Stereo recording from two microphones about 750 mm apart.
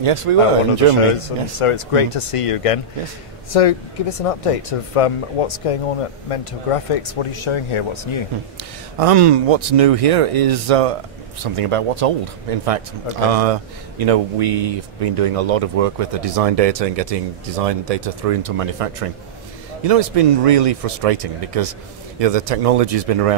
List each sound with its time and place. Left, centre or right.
0.0 s a man's voice: right
1.6 s speech: left
9.0 s a man's voice: right